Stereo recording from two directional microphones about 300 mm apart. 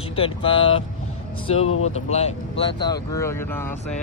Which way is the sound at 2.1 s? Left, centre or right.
Centre.